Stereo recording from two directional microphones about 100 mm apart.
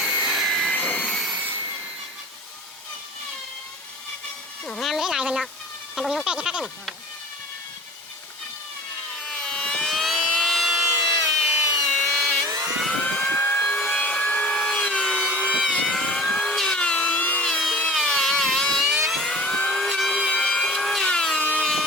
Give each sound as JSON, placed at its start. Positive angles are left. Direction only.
{"t": 0.0, "sound": "jet engine", "side_deg": -5}
{"t": 1.1, "sound": "vacuum cleaner", "side_deg": 0}
{"t": 4.8, "sound": "a sound", "side_deg": 0}
{"t": 9.2, "sound": "vehicle", "side_deg": 5}
{"t": 11.3, "sound": "tools", "side_deg": 0}
{"t": 12.9, "sound": "vehicle", "side_deg": 15}
{"t": 13.9, "sound": "wood", "side_deg": 10}
{"t": 15.6, "sound": "a sound", "side_deg": 10}
{"t": 17.5, "sound": "vehicle", "side_deg": 5}
{"t": 20.3, "sound": "a sound", "side_deg": 10}
{"t": 21.4, "sound": "sawing", "side_deg": 15}